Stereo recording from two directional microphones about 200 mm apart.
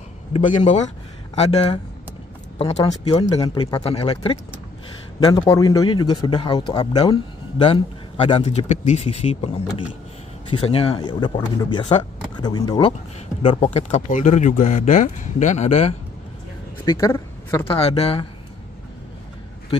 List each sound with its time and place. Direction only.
1.3 s speech: 30° left (ahead or behind)
16.8 s a woman's voice: 15° left (ahead or behind)
17.6 s speech: 30° left (ahead or behind)